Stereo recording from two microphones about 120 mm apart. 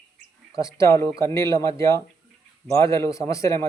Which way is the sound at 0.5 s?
25° left (ahead or behind).